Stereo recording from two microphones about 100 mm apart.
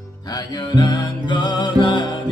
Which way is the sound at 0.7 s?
45° left (ahead or behind).